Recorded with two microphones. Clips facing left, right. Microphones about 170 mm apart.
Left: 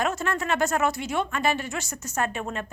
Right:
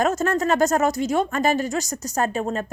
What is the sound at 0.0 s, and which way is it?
Speech, 45° right (ahead or behind).